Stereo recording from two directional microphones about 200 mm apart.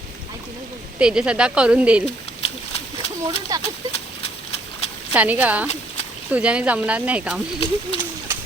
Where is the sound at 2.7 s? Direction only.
30° left (ahead or behind).